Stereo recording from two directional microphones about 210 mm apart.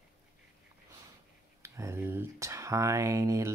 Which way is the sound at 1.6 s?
15° right (ahead or behind).